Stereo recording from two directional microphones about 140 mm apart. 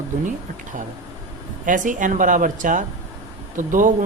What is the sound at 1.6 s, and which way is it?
Speech, 70° right (ahead or behind).